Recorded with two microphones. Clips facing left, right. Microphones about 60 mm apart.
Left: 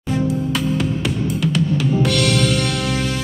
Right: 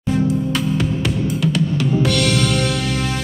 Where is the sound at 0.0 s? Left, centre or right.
Centre.